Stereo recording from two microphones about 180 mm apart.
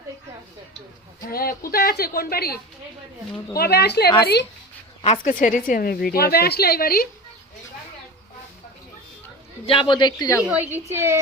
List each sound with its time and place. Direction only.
1.2 s a woman's voice: 55° left (ahead or behind)
5.0 s a woman's voice: 45° left (ahead or behind)
9.6 s speech: 30° left (ahead or behind)
10.5 s a woman's voice: 10° right (ahead or behind)